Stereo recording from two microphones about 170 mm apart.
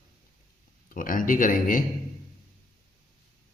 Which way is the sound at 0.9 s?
55° left (ahead or behind).